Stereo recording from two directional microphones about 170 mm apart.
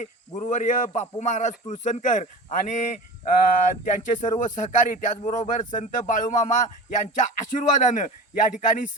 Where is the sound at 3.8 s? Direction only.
50° left (ahead or behind).